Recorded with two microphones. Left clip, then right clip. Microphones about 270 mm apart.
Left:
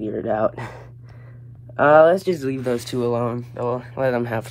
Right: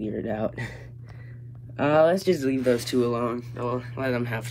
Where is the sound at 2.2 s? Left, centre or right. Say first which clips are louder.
Even; centre.